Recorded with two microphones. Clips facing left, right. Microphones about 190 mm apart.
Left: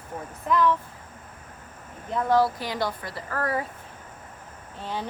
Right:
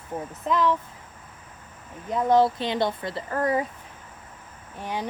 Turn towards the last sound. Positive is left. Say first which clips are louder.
# right 1 dB
turn(degrees=-15)  # may be behind; listen again after turning